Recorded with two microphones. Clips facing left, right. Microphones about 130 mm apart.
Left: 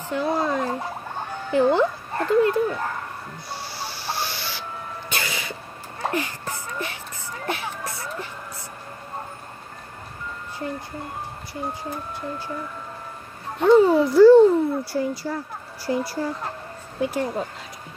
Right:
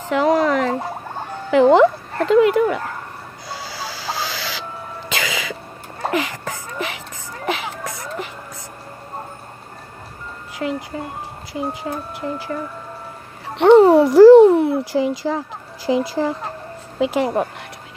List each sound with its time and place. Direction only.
0.1 s speech: 90° right
3.7 s a sound: 90° right
5.1 s gasp: 90° right
6.0 s a sound: 90° right
10.6 s speech: 90° right
11.8 s a child's voice: 90° right
13.6 s a child's voice: 75° right (ahead or behind)